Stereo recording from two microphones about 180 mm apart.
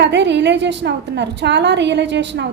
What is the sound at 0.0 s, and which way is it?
A woman's voice, 75° right (ahead or behind).